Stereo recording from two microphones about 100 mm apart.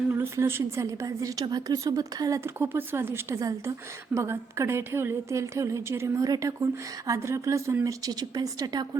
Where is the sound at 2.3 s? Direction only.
25° right (ahead or behind).